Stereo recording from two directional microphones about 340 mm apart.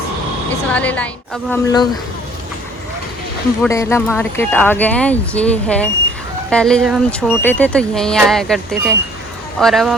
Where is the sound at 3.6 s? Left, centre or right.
Centre.